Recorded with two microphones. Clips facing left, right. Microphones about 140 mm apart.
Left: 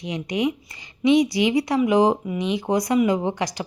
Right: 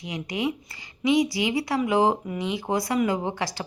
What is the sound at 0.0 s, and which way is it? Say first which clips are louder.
A woman's voice: left 4 dB; 20° left (ahead or behind).